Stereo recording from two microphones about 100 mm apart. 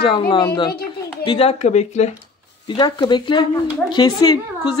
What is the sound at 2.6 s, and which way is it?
A woman's voice, 50° left (ahead or behind).